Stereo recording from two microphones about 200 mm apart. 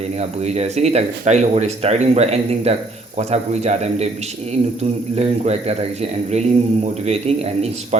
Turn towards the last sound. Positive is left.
turn(degrees=-30)  # may be behind; listen again after turning